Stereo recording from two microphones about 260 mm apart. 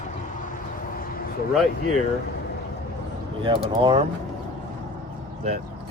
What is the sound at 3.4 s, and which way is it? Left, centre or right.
Speech, right.